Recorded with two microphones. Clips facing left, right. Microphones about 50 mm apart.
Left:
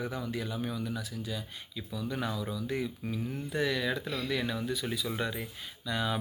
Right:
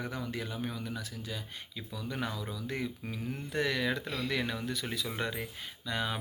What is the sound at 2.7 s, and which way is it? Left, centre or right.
Speech, right.